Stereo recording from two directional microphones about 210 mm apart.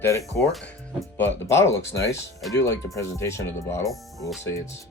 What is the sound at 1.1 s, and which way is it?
Speech, 10° left (ahead or behind).